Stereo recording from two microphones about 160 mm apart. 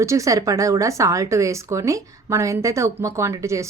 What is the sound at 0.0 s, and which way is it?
A woman's voice, 20° right (ahead or behind).